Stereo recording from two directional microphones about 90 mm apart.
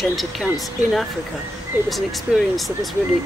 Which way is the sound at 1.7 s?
15° right (ahead or behind).